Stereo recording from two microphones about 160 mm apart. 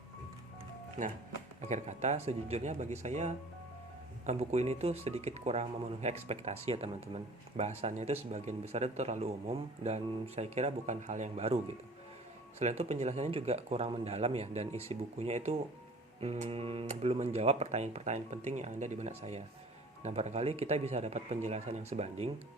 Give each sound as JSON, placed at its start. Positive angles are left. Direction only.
{"t": 1.0, "sound": "speech", "side_deg": -50}